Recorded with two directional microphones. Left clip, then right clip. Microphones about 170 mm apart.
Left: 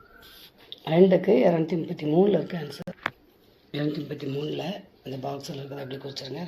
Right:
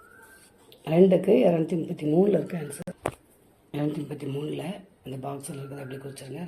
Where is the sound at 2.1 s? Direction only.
10° right (ahead or behind).